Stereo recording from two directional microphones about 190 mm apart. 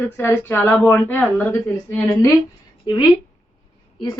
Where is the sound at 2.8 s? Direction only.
20° left (ahead or behind).